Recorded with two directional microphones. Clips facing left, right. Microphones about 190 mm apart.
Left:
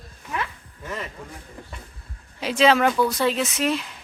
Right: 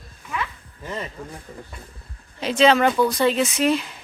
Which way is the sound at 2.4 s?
5° left (ahead or behind).